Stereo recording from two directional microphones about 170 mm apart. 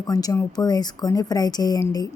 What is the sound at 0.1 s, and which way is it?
Speech, 20° left (ahead or behind).